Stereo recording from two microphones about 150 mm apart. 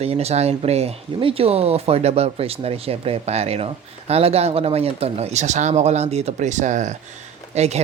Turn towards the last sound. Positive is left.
turn(degrees=-45)  # may be behind; listen again after turning